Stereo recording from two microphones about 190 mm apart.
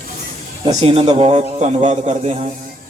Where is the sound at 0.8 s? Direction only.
30° right (ahead or behind).